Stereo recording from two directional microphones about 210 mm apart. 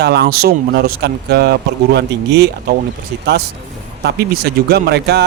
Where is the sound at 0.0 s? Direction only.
50° right (ahead or behind).